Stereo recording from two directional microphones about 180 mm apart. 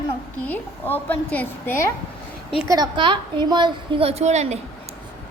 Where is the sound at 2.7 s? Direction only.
25° right (ahead or behind).